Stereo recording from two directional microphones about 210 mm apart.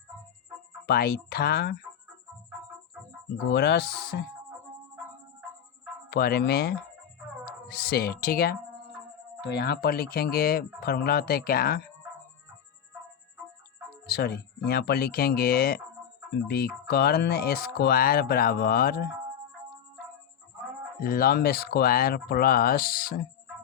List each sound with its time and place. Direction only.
0.9 s speech: 45° left (ahead or behind)
3.5 s speech: 50° left (ahead or behind)
6.1 s speech: 50° left (ahead or behind)
14.1 s speech: 50° left (ahead or behind)
21.0 s speech: 45° left (ahead or behind)